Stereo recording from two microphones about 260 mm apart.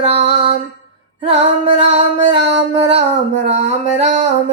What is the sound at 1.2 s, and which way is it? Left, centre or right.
Speech, right.